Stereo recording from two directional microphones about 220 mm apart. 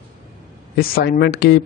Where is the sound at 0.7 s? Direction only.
45° left (ahead or behind).